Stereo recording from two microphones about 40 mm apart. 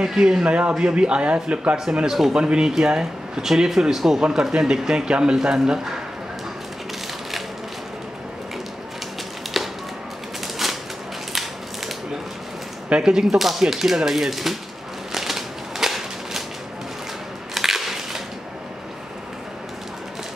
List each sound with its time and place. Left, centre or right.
0.0 s speech: centre; by 1.8 s right
2.0 s speech: centre
2.3 s speech: right
10.6 s typewriter: centre
12.9 s speech: centre
15.1 s typewriter: centre
17.6 s whip: centre